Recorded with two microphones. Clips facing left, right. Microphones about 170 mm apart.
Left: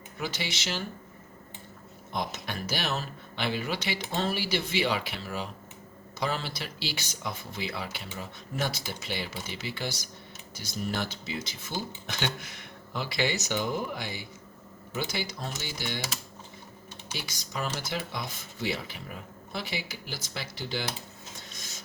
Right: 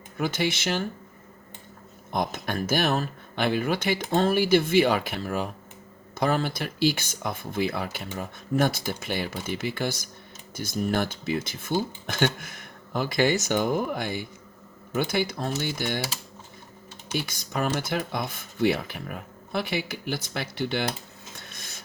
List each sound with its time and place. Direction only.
0.2 s speech: 55° right (ahead or behind)
2.1 s speech: 50° right (ahead or behind)
17.1 s speech: 55° right (ahead or behind)
21.5 s a sound: 60° right (ahead or behind)